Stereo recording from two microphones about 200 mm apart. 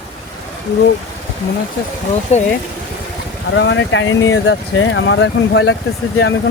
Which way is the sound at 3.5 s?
65° left (ahead or behind).